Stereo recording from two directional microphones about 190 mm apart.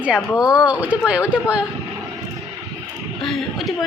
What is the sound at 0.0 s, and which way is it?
A woman's voice, 5° right (ahead or behind).